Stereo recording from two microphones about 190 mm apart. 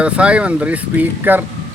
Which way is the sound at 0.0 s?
5° right (ahead or behind).